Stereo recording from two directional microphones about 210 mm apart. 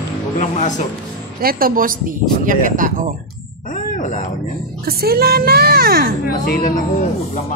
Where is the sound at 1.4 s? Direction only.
45° right (ahead or behind).